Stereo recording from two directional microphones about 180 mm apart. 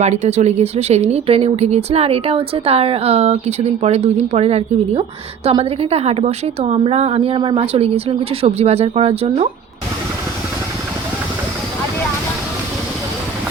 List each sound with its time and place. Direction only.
0.0 s a woman's voice: 40° right (ahead or behind)